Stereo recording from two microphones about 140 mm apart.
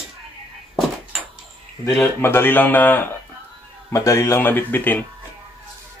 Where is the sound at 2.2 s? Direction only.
15° left (ahead or behind).